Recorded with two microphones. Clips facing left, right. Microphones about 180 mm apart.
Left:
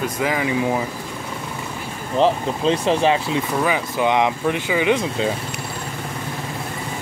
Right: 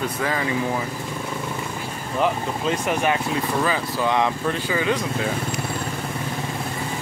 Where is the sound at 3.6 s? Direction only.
15° left (ahead or behind).